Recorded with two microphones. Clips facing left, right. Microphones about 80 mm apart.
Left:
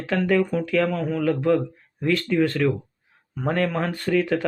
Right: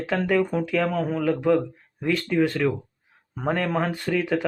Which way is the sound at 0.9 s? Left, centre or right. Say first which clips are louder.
Even; right.